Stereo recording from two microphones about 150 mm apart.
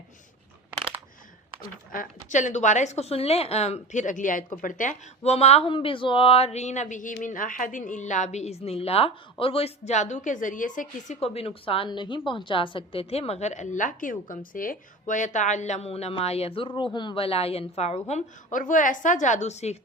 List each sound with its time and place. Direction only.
1.9 s a woman's voice: 60° left (ahead or behind)
5.2 s a woman's voice: 45° left (ahead or behind); by 11.2 s 60° left (ahead or behind)
11.2 s a woman's voice: 40° left (ahead or behind)
18.1 s a woman's voice: 60° left (ahead or behind)